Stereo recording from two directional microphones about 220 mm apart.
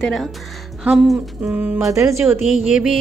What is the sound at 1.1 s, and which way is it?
Speech, 10° right (ahead or behind).